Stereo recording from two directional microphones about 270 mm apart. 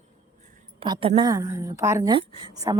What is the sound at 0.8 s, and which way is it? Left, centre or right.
A woman's voice, centre.